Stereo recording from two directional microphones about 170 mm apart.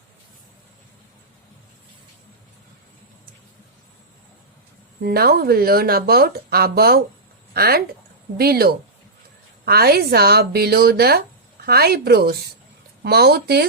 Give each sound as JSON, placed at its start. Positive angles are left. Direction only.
{"t": 5.0, "sound": "speech", "side_deg": -65}